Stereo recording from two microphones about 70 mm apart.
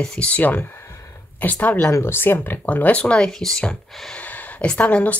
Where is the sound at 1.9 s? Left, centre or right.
Left; by 4.2 s centre.